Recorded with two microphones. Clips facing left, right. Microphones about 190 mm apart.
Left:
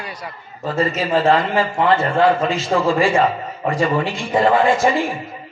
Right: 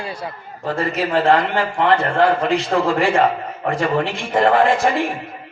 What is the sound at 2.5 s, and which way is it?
Speech, 60° right (ahead or behind).